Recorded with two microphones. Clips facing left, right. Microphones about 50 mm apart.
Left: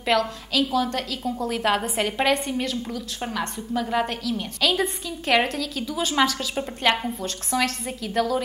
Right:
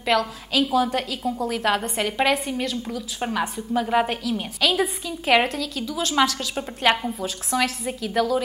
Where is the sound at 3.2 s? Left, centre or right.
Centre.